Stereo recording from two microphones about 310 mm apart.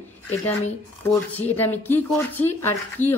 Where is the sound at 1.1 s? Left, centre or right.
Centre.